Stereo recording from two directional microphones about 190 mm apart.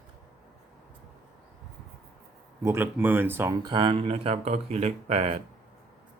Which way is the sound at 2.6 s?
10° right (ahead or behind).